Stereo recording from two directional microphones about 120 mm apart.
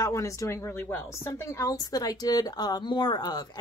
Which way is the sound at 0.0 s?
25° left (ahead or behind).